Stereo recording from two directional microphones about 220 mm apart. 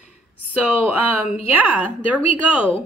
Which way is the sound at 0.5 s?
5° right (ahead or behind).